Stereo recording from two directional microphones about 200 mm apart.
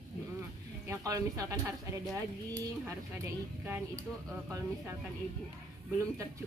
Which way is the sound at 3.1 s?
10° right (ahead or behind).